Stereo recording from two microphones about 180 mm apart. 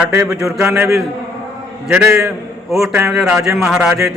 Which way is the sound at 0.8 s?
15° right (ahead or behind).